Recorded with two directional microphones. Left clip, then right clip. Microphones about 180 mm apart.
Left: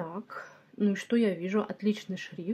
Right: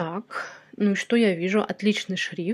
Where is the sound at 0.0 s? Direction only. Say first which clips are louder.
Right 9 dB; 25° right (ahead or behind).